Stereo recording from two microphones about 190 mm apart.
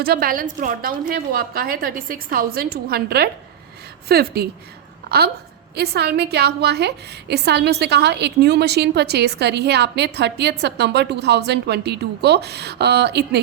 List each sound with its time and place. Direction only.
0.0 s a woman's voice: 50° right (ahead or behind)
5.7 s a woman's voice: 60° right (ahead or behind)